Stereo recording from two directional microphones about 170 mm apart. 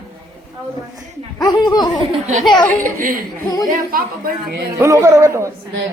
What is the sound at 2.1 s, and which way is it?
A man's voice, 45° right (ahead or behind).